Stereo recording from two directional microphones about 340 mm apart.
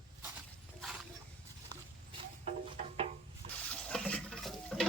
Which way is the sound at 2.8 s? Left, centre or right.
Centre.